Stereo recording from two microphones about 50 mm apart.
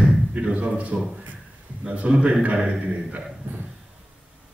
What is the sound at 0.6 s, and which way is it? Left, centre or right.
A man's voice, right.